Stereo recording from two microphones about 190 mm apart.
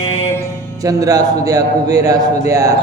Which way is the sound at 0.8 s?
20° right (ahead or behind).